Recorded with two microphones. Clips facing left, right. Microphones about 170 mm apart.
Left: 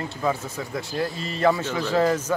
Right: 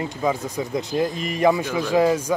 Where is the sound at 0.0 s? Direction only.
15° right (ahead or behind).